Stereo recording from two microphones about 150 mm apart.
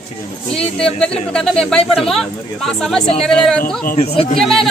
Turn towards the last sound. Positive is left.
turn(degrees=0)  # may be behind; listen again after turning